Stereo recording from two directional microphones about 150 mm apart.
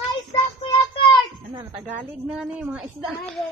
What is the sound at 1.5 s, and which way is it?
Speech, 30° right (ahead or behind).